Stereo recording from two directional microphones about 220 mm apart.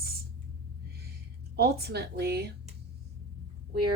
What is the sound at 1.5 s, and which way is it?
Speech, 45° right (ahead or behind).